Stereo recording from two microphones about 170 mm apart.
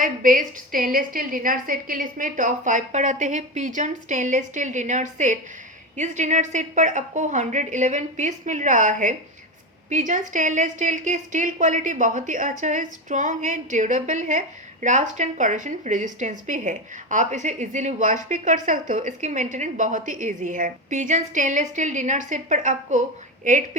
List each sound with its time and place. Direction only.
0.3 s a woman's voice: 55° right (ahead or behind)